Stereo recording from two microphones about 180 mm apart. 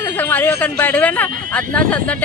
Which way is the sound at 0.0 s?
10° left (ahead or behind).